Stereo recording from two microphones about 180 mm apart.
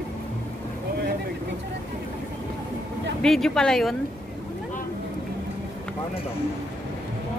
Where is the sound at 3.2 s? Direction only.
5° left (ahead or behind).